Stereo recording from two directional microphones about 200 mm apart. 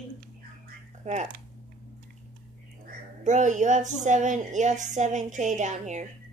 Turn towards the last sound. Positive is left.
turn(degrees=-35)  # may be behind; listen again after turning